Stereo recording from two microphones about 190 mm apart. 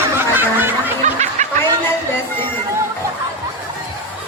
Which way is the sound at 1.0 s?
40° right (ahead or behind).